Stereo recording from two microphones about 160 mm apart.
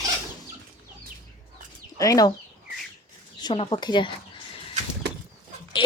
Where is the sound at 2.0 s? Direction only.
20° left (ahead or behind).